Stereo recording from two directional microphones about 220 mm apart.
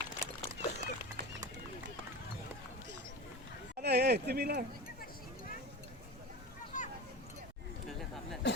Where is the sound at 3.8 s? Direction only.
50° right (ahead or behind).